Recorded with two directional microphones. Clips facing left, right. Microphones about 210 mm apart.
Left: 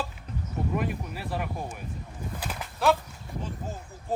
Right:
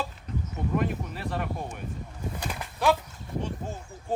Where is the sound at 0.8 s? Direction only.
5° left (ahead or behind).